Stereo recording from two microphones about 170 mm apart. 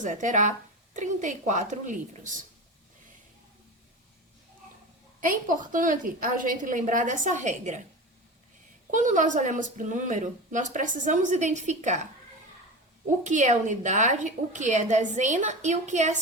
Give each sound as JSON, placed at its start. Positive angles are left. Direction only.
{"t": 0.0, "sound": "speech", "side_deg": -45}
{"t": 5.2, "sound": "speech", "side_deg": -50}
{"t": 8.9, "sound": "speech", "side_deg": -45}
{"t": 13.2, "sound": "speech", "side_deg": -45}